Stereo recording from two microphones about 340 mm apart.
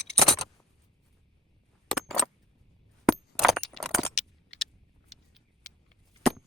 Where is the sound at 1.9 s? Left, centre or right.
Centre.